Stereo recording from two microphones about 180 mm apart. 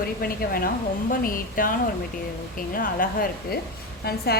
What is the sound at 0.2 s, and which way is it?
A woman's voice, 55° left (ahead or behind).